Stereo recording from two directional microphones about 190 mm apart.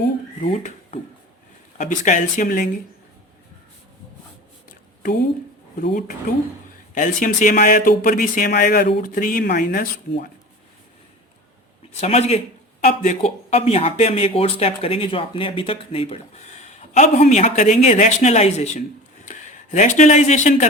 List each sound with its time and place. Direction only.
1.8 s speech: 40° left (ahead or behind)
5.8 s speech: 50° left (ahead or behind)
11.9 s speech: 35° left (ahead or behind)